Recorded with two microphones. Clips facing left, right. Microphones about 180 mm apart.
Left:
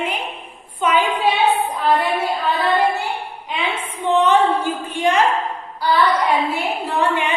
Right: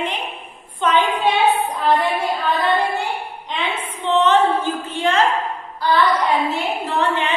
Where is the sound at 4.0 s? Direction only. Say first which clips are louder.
Even; 10° left (ahead or behind).